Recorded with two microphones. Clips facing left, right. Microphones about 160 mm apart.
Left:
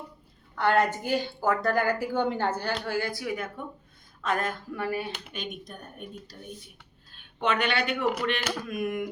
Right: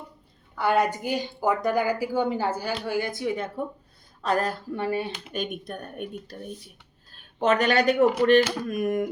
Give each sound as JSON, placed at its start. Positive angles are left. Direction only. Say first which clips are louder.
{"t": 0.5, "sound": "a woman's voice", "louder": "right 1 dB", "side_deg": -10}
{"t": 5.3, "sound": "speech", "louder": "right 7 dB", "side_deg": -50}
{"t": 7.1, "sound": "speech", "louder": "right 5 dB", "side_deg": -40}